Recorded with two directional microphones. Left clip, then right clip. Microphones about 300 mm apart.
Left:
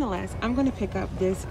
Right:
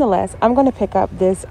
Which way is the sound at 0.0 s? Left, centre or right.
Left.